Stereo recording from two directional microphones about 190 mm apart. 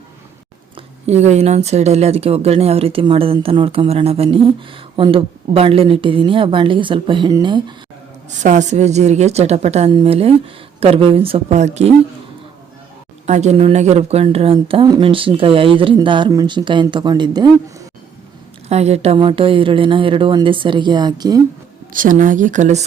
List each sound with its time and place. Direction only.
0.8 s speech: 35° right (ahead or behind)
8.4 s speech: 40° right (ahead or behind)
13.2 s speech: 35° right (ahead or behind); by 17.8 s 20° right (ahead or behind)
18.7 s speech: 35° right (ahead or behind)
21.9 s speech: 45° right (ahead or behind)